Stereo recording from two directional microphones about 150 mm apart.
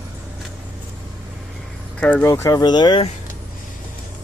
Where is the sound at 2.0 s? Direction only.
10° left (ahead or behind); by 3.0 s 30° left (ahead or behind).